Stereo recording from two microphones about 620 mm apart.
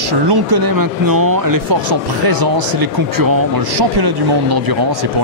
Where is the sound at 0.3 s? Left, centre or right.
Right.